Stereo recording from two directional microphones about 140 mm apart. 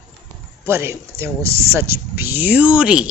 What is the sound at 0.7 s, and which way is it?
Speech, 20° right (ahead or behind).